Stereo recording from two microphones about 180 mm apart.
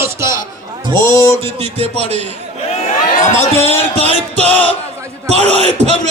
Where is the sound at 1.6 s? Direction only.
35° right (ahead or behind).